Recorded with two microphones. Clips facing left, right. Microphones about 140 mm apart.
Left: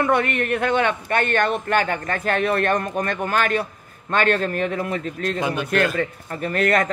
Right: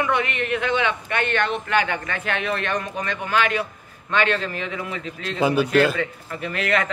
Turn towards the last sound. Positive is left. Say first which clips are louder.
# left 4 dB
turn(degrees=45)  # may be behind; listen again after turning